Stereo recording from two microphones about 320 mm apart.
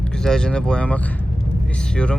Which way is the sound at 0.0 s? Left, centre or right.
Centre.